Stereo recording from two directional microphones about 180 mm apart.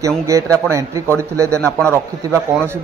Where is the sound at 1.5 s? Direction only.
5° left (ahead or behind).